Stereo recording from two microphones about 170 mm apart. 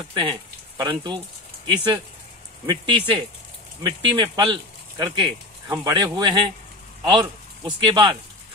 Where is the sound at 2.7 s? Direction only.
25° right (ahead or behind).